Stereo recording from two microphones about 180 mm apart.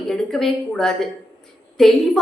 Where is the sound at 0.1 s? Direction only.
Centre (ahead or behind).